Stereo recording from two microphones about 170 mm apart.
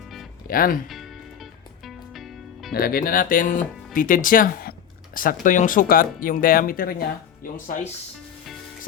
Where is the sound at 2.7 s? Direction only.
60° left (ahead or behind).